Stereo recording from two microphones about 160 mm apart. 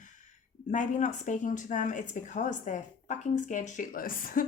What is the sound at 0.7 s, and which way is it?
A woman's voice, 50° left (ahead or behind).